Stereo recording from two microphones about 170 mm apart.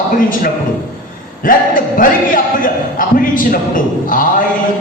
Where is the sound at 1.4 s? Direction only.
55° left (ahead or behind).